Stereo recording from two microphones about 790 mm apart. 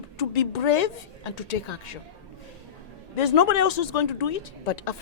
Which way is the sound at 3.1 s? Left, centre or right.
Left.